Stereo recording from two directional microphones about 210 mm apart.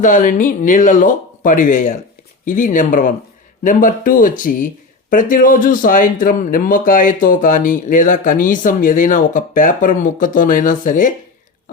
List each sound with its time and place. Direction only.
0.0 s speech: 40° left (ahead or behind)